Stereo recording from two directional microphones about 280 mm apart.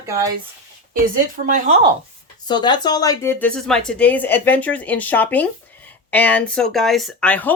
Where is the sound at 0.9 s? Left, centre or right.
Right.